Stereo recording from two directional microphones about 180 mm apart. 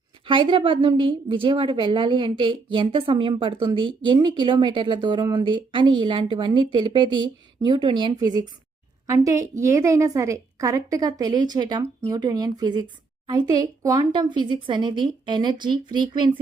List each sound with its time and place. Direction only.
0.3 s a woman's voice: 25° right (ahead or behind)